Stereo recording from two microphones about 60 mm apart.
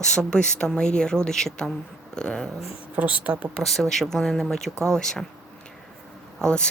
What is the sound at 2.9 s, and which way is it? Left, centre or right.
Speech, right.